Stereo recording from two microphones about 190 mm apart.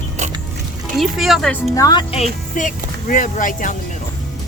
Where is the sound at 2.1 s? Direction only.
40° left (ahead or behind).